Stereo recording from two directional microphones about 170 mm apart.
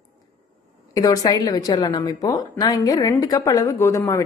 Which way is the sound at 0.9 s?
20° left (ahead or behind).